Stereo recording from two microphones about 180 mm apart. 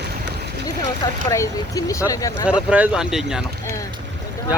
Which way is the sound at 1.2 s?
15° left (ahead or behind).